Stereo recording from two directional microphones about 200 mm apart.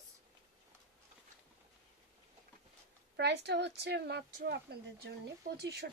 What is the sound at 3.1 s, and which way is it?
A woman's voice, 60° right (ahead or behind).